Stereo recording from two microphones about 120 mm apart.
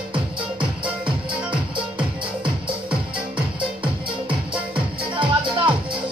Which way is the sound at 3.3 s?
45° right (ahead or behind).